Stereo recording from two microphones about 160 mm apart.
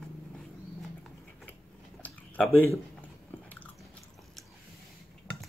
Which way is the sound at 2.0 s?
10° left (ahead or behind).